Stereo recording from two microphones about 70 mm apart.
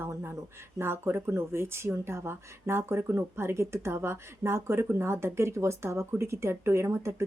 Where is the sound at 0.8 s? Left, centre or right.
Right.